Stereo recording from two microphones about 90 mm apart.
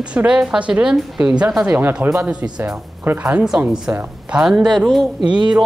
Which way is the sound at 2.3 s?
15° right (ahead or behind).